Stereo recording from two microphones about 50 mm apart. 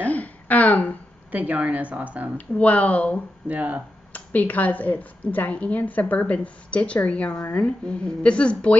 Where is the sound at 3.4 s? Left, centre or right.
Right.